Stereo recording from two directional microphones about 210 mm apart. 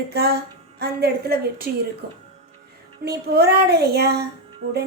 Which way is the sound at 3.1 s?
50° right (ahead or behind).